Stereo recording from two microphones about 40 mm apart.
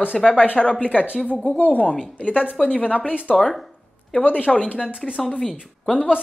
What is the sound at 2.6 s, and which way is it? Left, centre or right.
Speech, centre.